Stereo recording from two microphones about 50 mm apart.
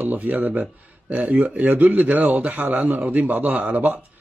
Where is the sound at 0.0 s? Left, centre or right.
Right.